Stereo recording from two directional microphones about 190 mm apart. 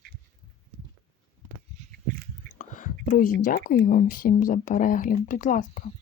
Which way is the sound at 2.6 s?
40° left (ahead or behind).